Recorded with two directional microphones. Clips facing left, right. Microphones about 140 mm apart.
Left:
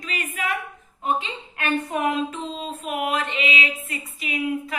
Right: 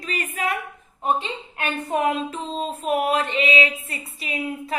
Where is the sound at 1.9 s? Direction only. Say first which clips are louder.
Right 1 dB; 35° right (ahead or behind).